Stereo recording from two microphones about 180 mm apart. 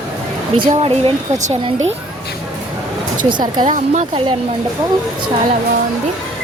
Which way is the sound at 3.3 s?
25° right (ahead or behind).